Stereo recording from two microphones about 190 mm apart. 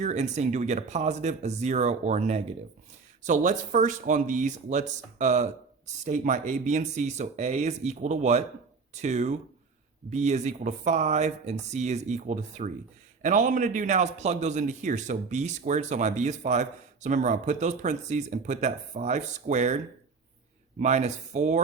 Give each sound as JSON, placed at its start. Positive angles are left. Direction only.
{"t": 0.0, "sound": "speech", "side_deg": -35}